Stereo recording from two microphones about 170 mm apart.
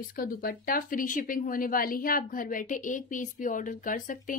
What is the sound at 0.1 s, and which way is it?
Speech, 55° left (ahead or behind).